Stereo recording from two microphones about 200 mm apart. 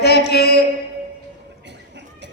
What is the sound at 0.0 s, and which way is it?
Mantra, 55° left (ahead or behind).